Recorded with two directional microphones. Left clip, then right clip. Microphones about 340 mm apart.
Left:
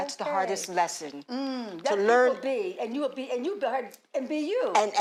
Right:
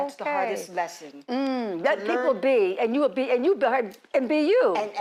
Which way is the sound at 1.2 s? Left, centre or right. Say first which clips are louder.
Right 9 dB; right.